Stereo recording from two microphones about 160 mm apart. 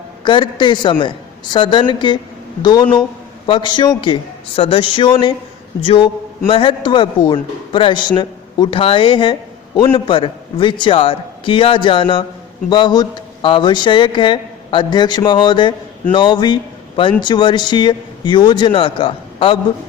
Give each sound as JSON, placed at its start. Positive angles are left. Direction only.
{"t": 0.3, "sound": "a man's voice", "side_deg": 30}